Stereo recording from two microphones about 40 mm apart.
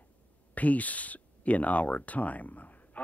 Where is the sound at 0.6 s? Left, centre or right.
Left.